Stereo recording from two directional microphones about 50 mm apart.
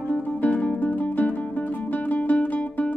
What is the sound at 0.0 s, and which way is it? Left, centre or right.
Music, left.